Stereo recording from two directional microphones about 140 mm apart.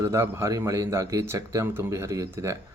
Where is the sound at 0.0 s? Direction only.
20° right (ahead or behind).